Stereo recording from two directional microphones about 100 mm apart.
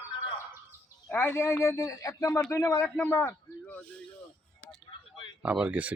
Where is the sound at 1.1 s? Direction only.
20° left (ahead or behind).